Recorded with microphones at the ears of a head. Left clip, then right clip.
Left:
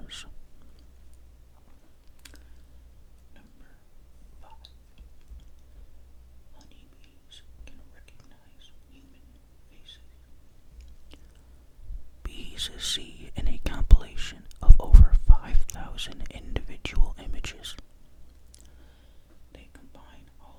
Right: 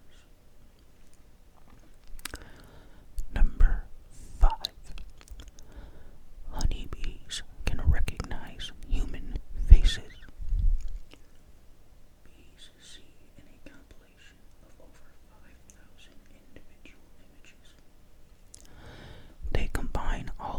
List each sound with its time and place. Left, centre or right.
2.2 s a sound: right
3.3 s whispering: right
12.2 s whispering: left
18.8 s whispering: right